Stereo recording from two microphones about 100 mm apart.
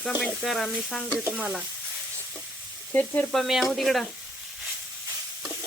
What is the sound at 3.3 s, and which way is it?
Sizzle, centre (ahead or behind).